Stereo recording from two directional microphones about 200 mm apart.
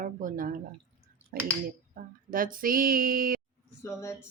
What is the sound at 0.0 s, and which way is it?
Speech, 40° right (ahead or behind).